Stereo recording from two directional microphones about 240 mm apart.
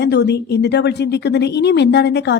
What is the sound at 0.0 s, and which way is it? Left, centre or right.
Speech, left.